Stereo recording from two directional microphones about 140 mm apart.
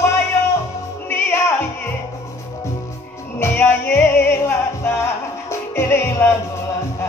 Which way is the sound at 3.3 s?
15° left (ahead or behind).